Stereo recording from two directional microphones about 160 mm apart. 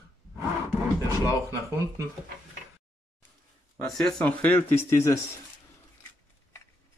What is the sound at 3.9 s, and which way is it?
Speech, 5° left (ahead or behind).